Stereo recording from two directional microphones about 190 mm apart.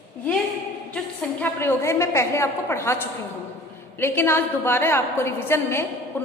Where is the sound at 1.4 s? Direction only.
10° left (ahead or behind).